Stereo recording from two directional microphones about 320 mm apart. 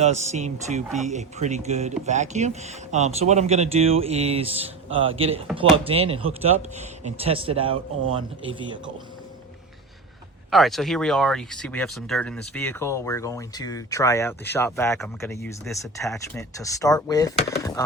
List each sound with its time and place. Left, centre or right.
0.0 s speech: right
10.5 s speech: centre